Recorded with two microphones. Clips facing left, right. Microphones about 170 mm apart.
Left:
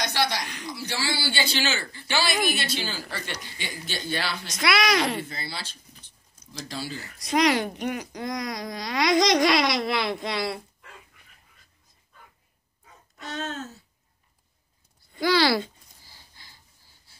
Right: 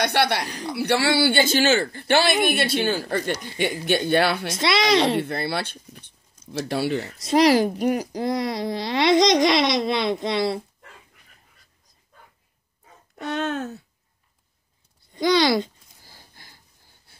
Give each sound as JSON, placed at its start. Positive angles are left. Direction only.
{"t": 0.0, "sound": "speech", "side_deg": -60}
{"t": 4.6, "sound": "speech", "side_deg": -25}
{"t": 5.2, "sound": "speech", "side_deg": -60}
{"t": 7.2, "sound": "a woman's voice", "side_deg": -30}
{"t": 13.2, "sound": "speech", "side_deg": -60}
{"t": 15.1, "sound": "speech", "side_deg": -20}
{"t": 16.0, "sound": "a sound", "side_deg": -45}